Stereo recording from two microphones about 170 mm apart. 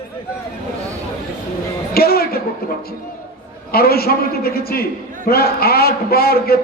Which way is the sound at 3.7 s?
65° left (ahead or behind).